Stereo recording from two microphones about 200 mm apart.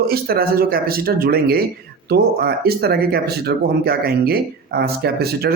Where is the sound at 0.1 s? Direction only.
50° right (ahead or behind).